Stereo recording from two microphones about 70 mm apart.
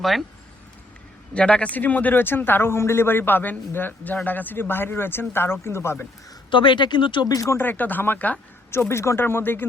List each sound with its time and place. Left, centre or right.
0.0 s speech: centre
1.3 s speech: centre; by 6.1 s left
6.7 s speech: left
7.5 s speech: left
8.7 s speech: left